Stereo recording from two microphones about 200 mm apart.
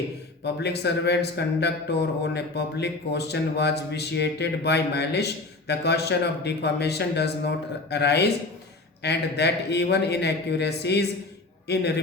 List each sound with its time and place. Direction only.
0.4 s a man's voice: 55° left (ahead or behind)